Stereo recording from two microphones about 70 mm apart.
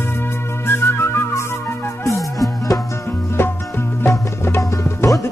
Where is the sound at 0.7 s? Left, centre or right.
Left.